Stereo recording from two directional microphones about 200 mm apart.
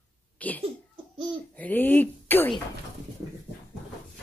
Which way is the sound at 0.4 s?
10° left (ahead or behind).